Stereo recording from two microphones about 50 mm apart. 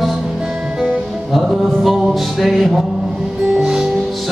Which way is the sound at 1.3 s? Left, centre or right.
Centre.